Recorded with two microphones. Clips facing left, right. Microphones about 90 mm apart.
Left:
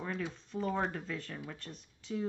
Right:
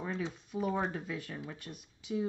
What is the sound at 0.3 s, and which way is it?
Speech, 10° right (ahead or behind).